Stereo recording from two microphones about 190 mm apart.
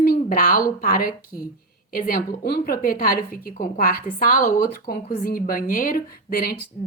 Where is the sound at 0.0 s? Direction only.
50° left (ahead or behind).